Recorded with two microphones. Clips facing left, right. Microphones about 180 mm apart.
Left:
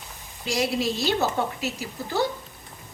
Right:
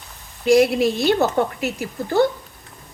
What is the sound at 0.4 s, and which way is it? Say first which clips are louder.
A woman's voice: right 10 dB; 55° right (ahead or behind).